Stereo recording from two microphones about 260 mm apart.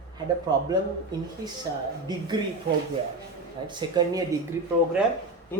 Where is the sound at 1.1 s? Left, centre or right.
Centre.